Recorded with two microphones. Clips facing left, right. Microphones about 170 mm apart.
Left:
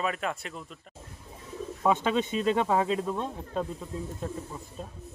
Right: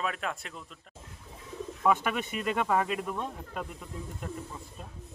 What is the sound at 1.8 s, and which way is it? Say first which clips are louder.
Speech: left 2 dB; 25° left (ahead or behind).